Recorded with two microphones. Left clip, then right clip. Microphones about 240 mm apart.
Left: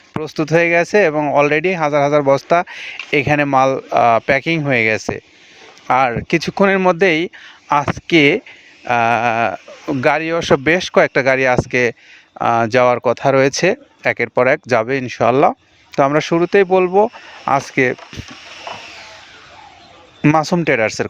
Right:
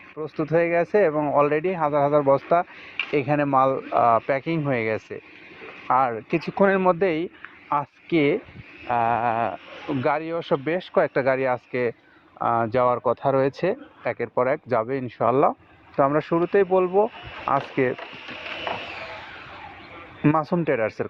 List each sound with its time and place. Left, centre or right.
0.2 s speech: left
18.7 s vehicle: centre
20.2 s speech: left